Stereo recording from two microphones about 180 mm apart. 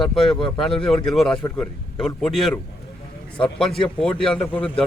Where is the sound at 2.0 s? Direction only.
5° left (ahead or behind).